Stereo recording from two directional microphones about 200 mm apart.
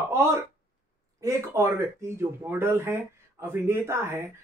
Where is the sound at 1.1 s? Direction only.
15° right (ahead or behind).